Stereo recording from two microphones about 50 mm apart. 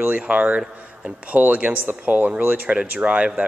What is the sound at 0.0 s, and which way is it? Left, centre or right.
Speech, right.